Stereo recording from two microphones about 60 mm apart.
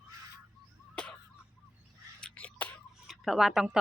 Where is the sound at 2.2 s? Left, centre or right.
Left.